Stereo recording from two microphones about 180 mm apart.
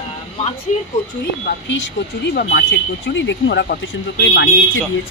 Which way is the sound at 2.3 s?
70° left (ahead or behind).